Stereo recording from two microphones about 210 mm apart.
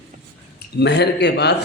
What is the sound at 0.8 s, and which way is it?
Speech, 55° left (ahead or behind).